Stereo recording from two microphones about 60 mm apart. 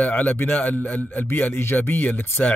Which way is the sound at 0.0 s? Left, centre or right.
Left.